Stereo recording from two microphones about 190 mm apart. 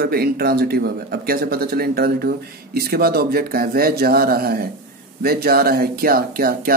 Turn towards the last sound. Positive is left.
turn(degrees=-55)  # may be behind; listen again after turning